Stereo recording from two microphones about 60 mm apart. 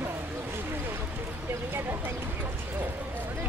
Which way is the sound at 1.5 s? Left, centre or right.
Right.